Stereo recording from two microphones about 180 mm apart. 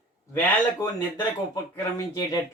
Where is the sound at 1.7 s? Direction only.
20° left (ahead or behind).